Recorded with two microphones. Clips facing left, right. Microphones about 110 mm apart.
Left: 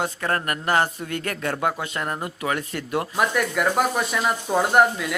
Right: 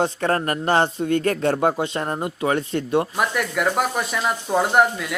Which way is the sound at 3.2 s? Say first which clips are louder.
Even; centre (ahead or behind).